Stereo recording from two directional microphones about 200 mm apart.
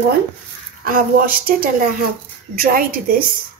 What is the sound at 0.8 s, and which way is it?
Speech, 45° right (ahead or behind).